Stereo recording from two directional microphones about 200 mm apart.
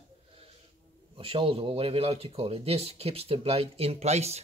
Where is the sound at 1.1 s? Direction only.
25° right (ahead or behind).